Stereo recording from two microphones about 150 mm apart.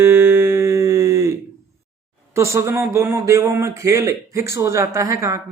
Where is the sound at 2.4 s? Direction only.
20° right (ahead or behind).